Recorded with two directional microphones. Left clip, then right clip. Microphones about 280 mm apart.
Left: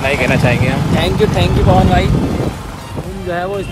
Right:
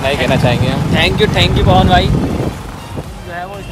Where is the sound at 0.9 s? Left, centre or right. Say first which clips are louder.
Right 3 dB; centre.